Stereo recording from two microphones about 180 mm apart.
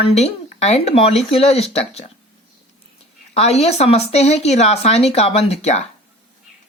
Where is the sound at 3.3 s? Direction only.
35° left (ahead or behind).